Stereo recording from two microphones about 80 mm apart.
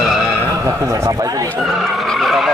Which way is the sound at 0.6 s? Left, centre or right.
Right.